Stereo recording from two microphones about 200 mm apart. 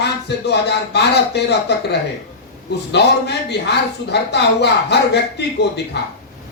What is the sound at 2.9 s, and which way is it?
Speech, 55° left (ahead or behind).